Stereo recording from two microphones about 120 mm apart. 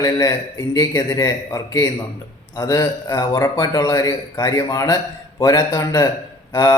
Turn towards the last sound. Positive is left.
turn(degrees=30)  # may be behind; listen again after turning